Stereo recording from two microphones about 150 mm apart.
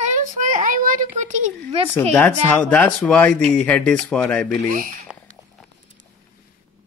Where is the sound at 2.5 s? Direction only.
10° left (ahead or behind).